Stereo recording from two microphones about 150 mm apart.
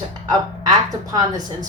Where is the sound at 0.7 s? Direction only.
25° right (ahead or behind).